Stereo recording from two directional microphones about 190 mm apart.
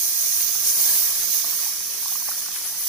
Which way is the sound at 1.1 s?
Centre (ahead or behind).